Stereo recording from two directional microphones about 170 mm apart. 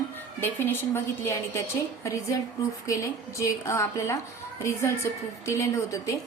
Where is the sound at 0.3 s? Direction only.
15° left (ahead or behind).